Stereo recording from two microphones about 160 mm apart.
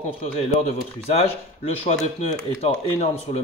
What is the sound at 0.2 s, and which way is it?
Speech, 40° left (ahead or behind).